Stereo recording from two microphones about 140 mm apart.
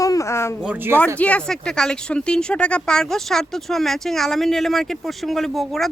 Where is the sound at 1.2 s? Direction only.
10° left (ahead or behind).